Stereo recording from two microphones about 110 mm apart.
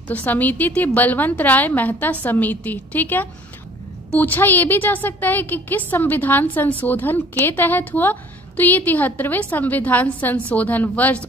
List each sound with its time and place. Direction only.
0.1 s a woman's voice: 15° left (ahead or behind)